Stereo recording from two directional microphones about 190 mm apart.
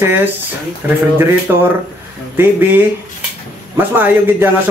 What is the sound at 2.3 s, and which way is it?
Speech, 10° right (ahead or behind).